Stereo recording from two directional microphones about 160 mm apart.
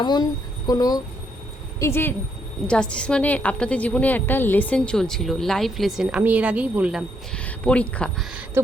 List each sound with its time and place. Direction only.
0.0 s a woman's voice: 25° left (ahead or behind); by 7.0 s 10° right (ahead or behind)
7.3 s speech: 5° left (ahead or behind)